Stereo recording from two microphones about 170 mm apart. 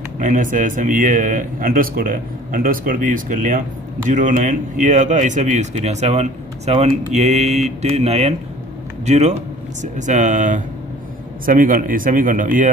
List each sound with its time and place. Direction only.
0.2 s a man's voice: 50° right (ahead or behind)